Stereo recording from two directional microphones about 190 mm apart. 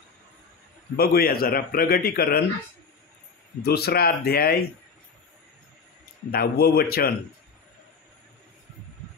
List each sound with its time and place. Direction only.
0.9 s a man's voice: 50° left (ahead or behind)
3.6 s speech: 55° left (ahead or behind)
6.3 s a man's voice: 55° left (ahead or behind)